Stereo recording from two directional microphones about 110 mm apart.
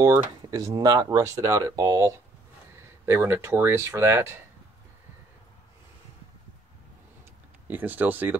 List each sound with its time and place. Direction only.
0.0 s speech: 30° right (ahead or behind)
7.6 s speech: 15° right (ahead or behind)